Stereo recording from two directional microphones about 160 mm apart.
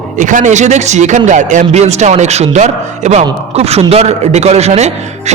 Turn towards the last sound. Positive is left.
turn(degrees=-45)  # may be behind; listen again after turning